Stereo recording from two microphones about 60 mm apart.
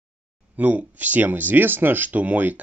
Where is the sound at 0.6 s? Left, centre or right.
Right.